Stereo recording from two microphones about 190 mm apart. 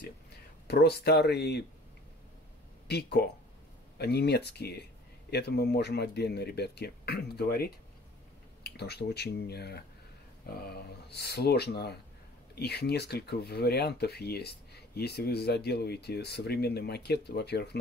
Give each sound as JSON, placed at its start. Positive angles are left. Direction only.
{"t": 0.7, "sound": "speech", "side_deg": 60}
{"t": 2.9, "sound": "speech", "side_deg": 60}